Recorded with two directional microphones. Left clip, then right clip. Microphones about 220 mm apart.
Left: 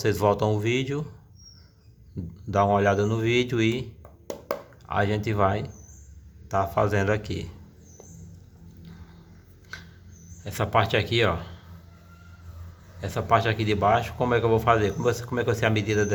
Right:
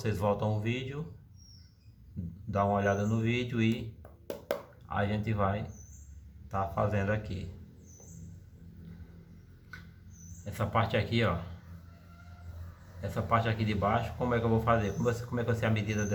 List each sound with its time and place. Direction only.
0.0 s a man's voice: 45° left (ahead or behind)
2.5 s a man's voice: 45° left (ahead or behind)
4.9 s a man's voice: 45° left (ahead or behind)
9.7 s a sound: 45° left (ahead or behind)
10.4 s a man's voice: 45° left (ahead or behind)
13.0 s a man's voice: 45° left (ahead or behind)